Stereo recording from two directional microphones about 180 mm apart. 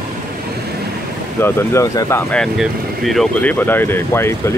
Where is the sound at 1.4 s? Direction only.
15° left (ahead or behind).